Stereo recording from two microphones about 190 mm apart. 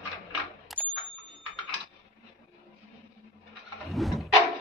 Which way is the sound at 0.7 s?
Centre (ahead or behind).